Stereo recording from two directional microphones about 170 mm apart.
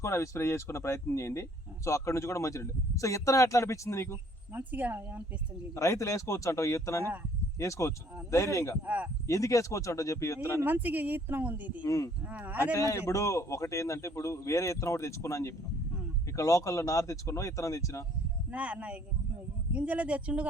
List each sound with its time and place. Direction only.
0.0 s speech: 15° left (ahead or behind)
4.5 s speech: 10° right (ahead or behind)
5.7 s speech: 20° left (ahead or behind)
7.0 s speech: 10° right (ahead or behind)
7.6 s speech: 20° left (ahead or behind)
10.6 s speech: 10° right (ahead or behind)
11.8 s speech: 20° left (ahead or behind)
12.3 s speech: 10° right (ahead or behind)
12.7 s speech: 15° left (ahead or behind)
18.5 s speech: 10° right (ahead or behind)